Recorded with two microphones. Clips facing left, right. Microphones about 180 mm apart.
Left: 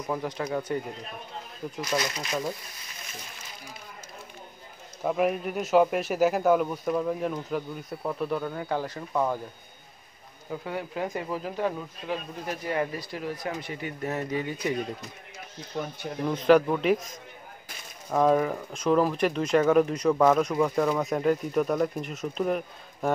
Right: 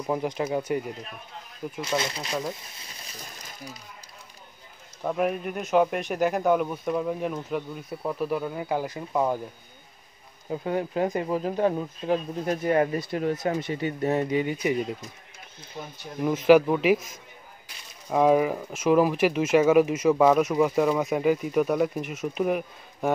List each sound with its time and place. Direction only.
0.0 s speech: 15° right (ahead or behind)
1.8 s speech: 25° right (ahead or behind)
5.0 s speech: centre (ahead or behind); by 9.4 s 15° right (ahead or behind)
10.5 s speech: 25° right (ahead or behind)
12.6 s speech: 50° right (ahead or behind)
13.6 s speech: 25° right (ahead or behind)
16.2 s speech: 5° right (ahead or behind)
18.1 s speech: 10° right (ahead or behind)